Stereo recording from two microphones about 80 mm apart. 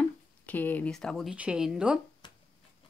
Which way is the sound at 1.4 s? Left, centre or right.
Centre.